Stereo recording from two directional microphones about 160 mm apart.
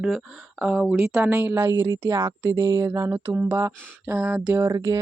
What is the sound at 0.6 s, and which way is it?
Speech, 5° right (ahead or behind).